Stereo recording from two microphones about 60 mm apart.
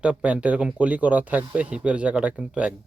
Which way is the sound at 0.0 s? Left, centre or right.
Centre.